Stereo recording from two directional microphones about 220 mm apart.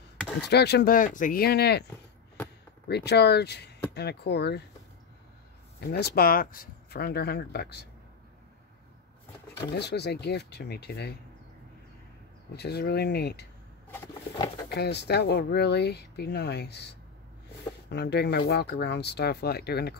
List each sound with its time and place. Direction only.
0.4 s speech: 50° left (ahead or behind)
2.9 s speech: 50° left (ahead or behind)
5.8 s speech: 45° left (ahead or behind)
9.8 s speech: 50° left (ahead or behind)
12.5 s speech: 50° left (ahead or behind)
14.7 s speech: 50° left (ahead or behind)